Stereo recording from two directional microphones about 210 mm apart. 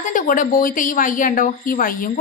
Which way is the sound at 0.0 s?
40° left (ahead or behind).